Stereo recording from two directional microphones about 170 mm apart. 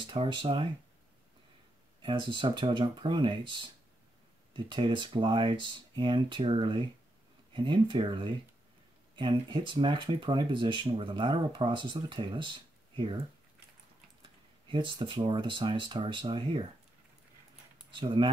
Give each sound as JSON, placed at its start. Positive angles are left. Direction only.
{"t": 0.0, "sound": "speech", "side_deg": -30}
{"t": 2.0, "sound": "speech", "side_deg": -30}
{"t": 4.6, "sound": "speech", "side_deg": -30}
{"t": 14.7, "sound": "speech", "side_deg": -30}
{"t": 17.9, "sound": "speech", "side_deg": -30}